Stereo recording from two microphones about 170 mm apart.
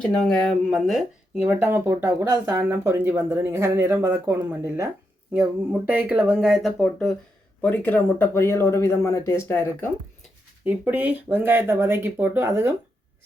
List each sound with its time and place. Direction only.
0.0 s speech: centre (ahead or behind)
10.7 s speech: 10° right (ahead or behind)